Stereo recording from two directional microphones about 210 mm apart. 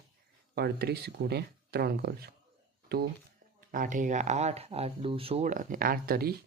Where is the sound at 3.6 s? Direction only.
40° right (ahead or behind).